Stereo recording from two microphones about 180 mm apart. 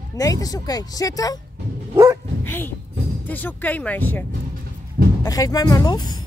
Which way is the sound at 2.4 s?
10° left (ahead or behind).